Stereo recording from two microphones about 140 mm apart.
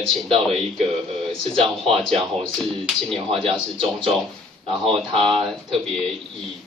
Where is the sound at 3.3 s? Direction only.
40° right (ahead or behind).